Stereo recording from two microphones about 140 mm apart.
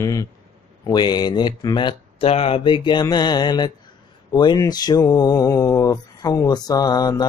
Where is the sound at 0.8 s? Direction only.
30° left (ahead or behind).